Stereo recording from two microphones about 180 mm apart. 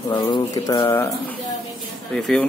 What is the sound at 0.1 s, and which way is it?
Speech, 25° left (ahead or behind).